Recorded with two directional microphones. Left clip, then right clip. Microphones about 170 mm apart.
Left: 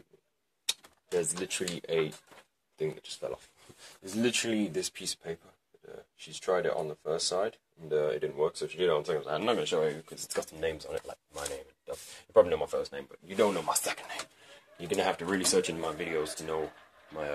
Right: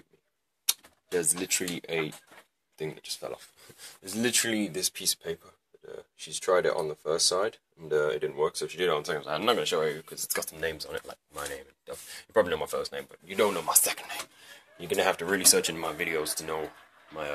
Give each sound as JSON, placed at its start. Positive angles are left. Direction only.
{"t": 1.2, "sound": "speech", "side_deg": 0}
{"t": 5.9, "sound": "speech", "side_deg": -30}
{"t": 7.9, "sound": "speech", "side_deg": -10}